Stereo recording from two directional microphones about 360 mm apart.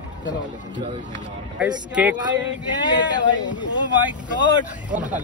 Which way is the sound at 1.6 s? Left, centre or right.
Centre.